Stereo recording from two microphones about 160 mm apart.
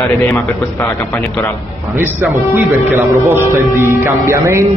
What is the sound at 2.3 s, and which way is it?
Speech, 15° right (ahead or behind).